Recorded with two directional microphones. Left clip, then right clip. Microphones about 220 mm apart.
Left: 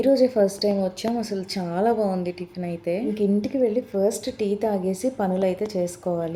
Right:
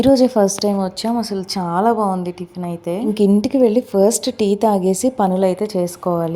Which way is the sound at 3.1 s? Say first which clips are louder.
Right 8 dB; 35° right (ahead or behind).